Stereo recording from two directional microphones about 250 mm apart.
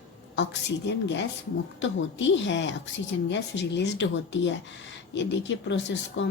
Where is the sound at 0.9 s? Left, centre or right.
Left.